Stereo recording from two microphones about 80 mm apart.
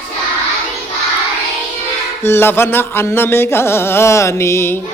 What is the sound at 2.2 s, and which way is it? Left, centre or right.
Carnatic music, left.